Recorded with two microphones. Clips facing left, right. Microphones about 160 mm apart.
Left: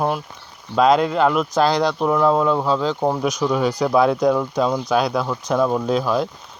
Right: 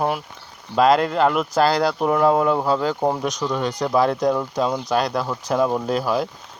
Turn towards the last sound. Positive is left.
turn(degrees=-5)  # may be behind; listen again after turning